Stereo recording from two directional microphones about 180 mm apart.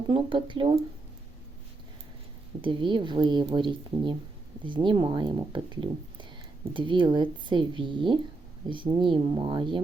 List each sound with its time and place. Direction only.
0.1 s speech: 25° right (ahead or behind)
2.6 s speech: 25° right (ahead or behind)